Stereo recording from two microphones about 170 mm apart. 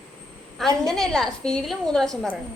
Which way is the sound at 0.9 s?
Centre (ahead or behind).